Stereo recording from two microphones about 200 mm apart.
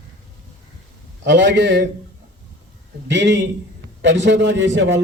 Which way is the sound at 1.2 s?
60° right (ahead or behind).